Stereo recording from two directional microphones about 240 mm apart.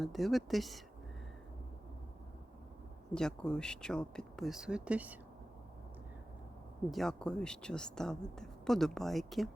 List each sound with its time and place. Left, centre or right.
0.0 s speech: centre
3.2 s speech: centre
6.9 s speech: centre